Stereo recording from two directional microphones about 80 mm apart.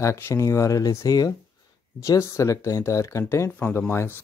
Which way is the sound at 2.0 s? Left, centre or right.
Left.